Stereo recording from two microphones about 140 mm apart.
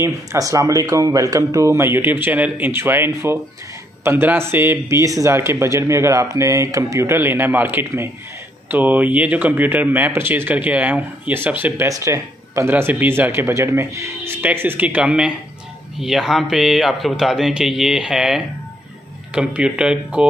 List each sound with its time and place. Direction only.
0.0 s speech: 20° right (ahead or behind); by 20.2 s 5° right (ahead or behind)